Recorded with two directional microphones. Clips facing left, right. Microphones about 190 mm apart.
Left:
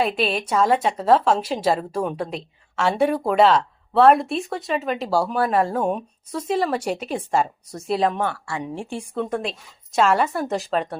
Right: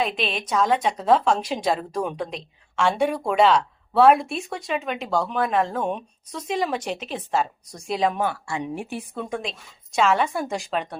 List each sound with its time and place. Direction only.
0.3 s a woman's voice: 5° left (ahead or behind)
8.2 s speech: 15° right (ahead or behind)
8.7 s a woman's voice: 25° left (ahead or behind)
9.1 s a woman's voice: 5° left (ahead or behind)